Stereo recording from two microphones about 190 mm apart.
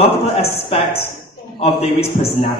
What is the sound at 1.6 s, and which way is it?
Speech, 30° left (ahead or behind).